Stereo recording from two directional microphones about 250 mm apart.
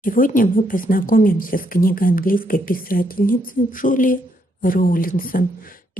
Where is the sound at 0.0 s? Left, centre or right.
Left.